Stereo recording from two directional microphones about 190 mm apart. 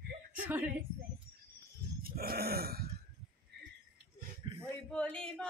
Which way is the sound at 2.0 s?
50° right (ahead or behind).